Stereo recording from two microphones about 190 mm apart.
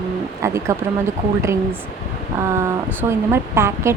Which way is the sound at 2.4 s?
15° right (ahead or behind).